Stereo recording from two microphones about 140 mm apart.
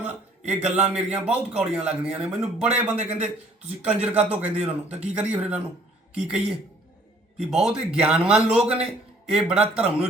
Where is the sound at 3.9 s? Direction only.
50° right (ahead or behind).